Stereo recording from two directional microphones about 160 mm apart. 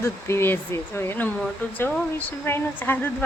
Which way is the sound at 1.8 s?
15° left (ahead or behind).